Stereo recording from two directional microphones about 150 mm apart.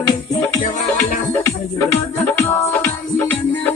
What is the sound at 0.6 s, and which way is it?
Music, 65° left (ahead or behind).